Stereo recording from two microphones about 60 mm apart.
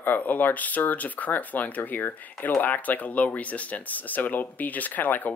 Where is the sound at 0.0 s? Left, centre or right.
Left.